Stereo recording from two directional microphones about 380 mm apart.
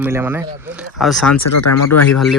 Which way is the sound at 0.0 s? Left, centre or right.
Centre.